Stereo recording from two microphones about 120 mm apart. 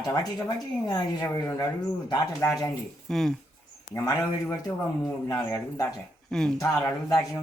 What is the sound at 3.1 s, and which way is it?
Speech, 5° left (ahead or behind).